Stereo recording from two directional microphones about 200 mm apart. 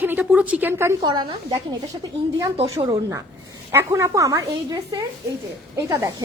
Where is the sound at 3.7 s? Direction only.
15° right (ahead or behind).